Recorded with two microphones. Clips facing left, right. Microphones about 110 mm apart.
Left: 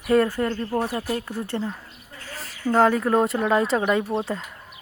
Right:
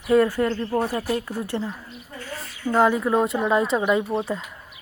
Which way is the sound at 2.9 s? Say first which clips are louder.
Left 1 dB; 50° left (ahead or behind).